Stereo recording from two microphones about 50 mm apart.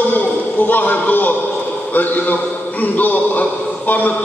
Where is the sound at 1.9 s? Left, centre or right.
Left.